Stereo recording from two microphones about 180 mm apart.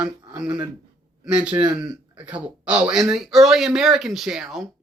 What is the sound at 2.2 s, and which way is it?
Speech, 5° right (ahead or behind).